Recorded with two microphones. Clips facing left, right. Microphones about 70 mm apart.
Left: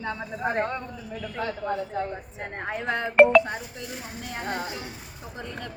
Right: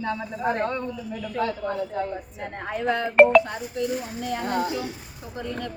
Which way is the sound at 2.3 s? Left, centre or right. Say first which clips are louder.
Even; left.